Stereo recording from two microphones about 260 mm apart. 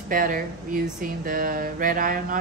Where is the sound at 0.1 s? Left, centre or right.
Right.